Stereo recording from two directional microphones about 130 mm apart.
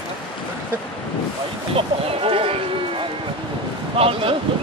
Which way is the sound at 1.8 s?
45° right (ahead or behind).